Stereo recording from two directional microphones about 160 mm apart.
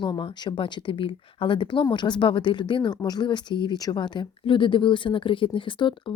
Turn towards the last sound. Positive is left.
turn(degrees=30)  # may be behind; listen again after turning